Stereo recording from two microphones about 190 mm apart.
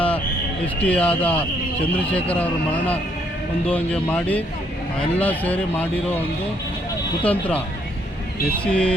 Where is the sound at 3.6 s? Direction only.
5° left (ahead or behind).